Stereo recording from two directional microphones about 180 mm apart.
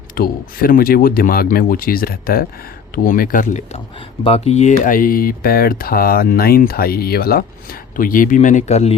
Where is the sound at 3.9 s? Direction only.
30° left (ahead or behind).